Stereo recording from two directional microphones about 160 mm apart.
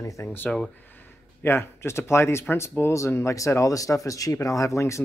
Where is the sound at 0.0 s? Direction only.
20° left (ahead or behind).